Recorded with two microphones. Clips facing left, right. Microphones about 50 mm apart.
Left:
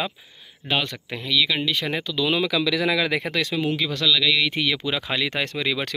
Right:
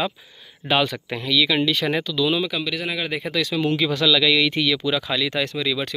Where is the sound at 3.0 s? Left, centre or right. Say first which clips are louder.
Left 3 dB; left.